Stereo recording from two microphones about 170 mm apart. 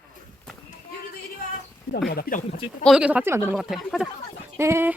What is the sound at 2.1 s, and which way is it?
Speech, 60° left (ahead or behind).